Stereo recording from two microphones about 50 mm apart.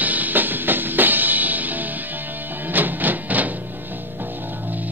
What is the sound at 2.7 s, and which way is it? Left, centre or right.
Printer, right.